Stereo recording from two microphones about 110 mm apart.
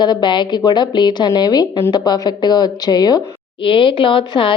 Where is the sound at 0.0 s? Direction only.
45° left (ahead or behind).